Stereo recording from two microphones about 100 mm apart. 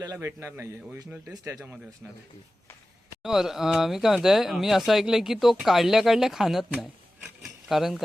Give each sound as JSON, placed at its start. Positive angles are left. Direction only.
{"t": 0.2, "sound": "a man's voice", "side_deg": -25}
{"t": 3.2, "sound": "speech", "side_deg": -5}